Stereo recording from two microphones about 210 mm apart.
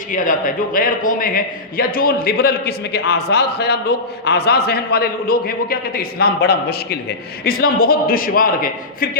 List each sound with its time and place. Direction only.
0.1 s a man's voice: 40° left (ahead or behind)